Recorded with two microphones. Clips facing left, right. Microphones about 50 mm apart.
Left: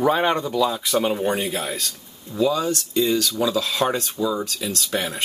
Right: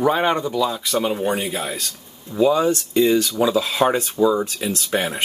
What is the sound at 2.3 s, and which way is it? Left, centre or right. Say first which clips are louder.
Speech: right 4 dB; right.